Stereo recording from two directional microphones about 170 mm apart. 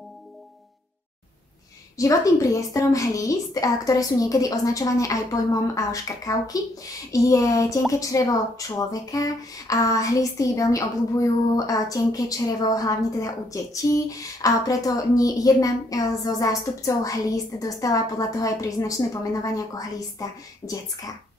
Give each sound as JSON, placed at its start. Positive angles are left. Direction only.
{"t": 2.0, "sound": "a woman's voice", "side_deg": 20}